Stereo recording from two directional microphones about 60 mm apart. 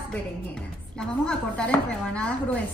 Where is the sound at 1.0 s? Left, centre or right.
Centre.